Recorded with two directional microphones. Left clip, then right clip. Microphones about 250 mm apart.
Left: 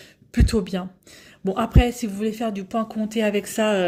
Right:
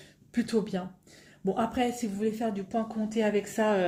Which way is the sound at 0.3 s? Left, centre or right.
Left.